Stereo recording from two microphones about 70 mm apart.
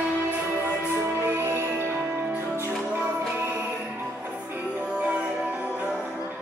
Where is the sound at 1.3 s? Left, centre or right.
Right.